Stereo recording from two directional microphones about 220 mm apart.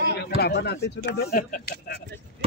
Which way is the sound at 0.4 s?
45° left (ahead or behind).